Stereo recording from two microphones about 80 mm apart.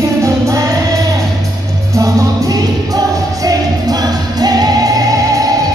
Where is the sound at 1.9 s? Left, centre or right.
Right.